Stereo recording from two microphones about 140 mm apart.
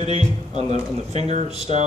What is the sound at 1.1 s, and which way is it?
Speech, 40° left (ahead or behind).